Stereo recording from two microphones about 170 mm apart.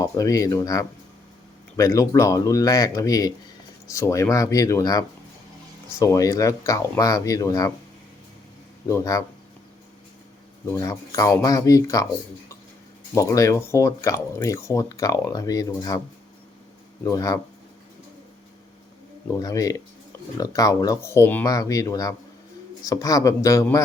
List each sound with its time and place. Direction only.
0.0 s speech: 20° left (ahead or behind)
8.9 s speech: 15° left (ahead or behind)
10.7 s speech: 20° left (ahead or behind)
13.1 s speech: 20° left (ahead or behind)
17.0 s speech: 20° left (ahead or behind)
19.4 s speech: 20° left (ahead or behind)